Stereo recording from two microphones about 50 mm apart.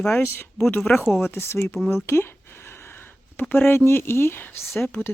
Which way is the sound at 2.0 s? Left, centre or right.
Left.